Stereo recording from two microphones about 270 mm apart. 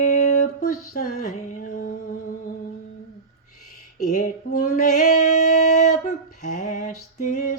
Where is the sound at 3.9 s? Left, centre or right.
Left.